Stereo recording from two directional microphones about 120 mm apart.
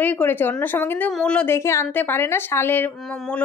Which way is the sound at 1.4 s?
20° left (ahead or behind).